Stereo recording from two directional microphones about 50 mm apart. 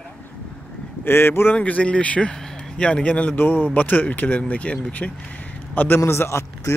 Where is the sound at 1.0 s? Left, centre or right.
Left.